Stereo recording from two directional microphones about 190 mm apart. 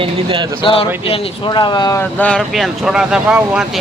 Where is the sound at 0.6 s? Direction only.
30° left (ahead or behind).